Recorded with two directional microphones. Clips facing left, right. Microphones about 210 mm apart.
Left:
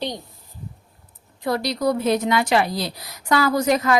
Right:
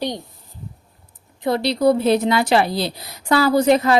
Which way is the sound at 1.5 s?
25° right (ahead or behind).